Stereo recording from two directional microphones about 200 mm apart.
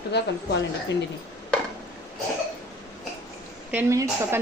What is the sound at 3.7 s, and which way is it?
Speech, 15° right (ahead or behind).